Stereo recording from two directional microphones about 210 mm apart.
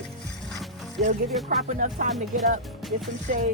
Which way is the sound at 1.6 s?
40° right (ahead or behind).